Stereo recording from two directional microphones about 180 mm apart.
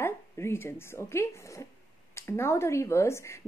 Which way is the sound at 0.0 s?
15° left (ahead or behind).